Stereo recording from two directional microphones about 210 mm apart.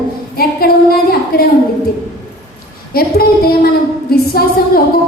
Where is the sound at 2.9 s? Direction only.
45° left (ahead or behind).